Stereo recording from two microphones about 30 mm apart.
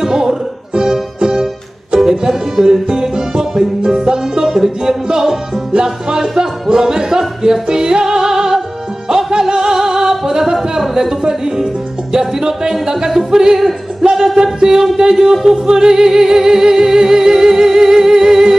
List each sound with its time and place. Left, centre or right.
0.0 s music: centre
5.7 s music: right
6.1 s music: centre
8.2 s music: centre
14.1 s music: centre